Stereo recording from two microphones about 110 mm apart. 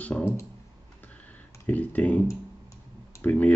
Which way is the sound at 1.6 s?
15° left (ahead or behind).